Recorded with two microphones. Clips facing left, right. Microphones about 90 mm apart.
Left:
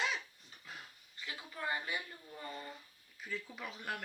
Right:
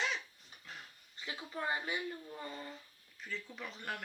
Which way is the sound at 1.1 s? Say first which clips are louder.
Right 4 dB; 25° right (ahead or behind).